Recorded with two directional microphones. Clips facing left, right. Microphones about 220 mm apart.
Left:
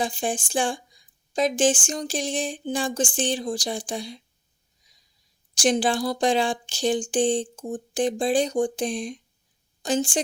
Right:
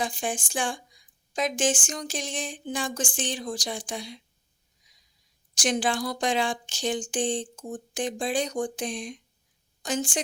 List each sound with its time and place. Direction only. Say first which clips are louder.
0.0 s speech: left 4 dB; 30° left (ahead or behind)
5.5 s a woman's voice: left 4 dB; 30° left (ahead or behind)